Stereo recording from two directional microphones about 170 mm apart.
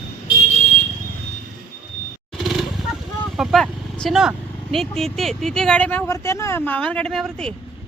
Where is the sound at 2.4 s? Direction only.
Centre (ahead or behind).